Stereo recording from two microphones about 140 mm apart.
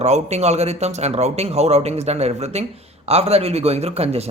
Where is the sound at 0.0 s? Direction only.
50° right (ahead or behind).